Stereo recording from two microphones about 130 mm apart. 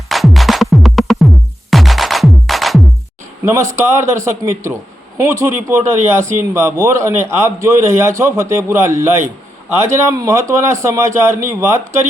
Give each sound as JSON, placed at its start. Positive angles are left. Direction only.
{"t": 0.1, "sound": "music", "side_deg": 0}
{"t": 3.7, "sound": "a man's voice", "side_deg": -20}